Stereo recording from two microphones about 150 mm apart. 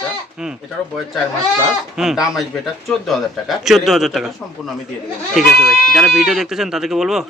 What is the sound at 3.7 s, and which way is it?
Speech, centre (ahead or behind).